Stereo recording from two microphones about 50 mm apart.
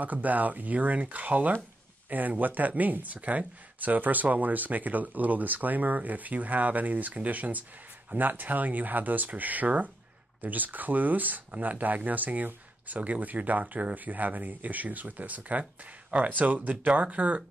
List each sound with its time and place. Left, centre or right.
0.0 s speech: right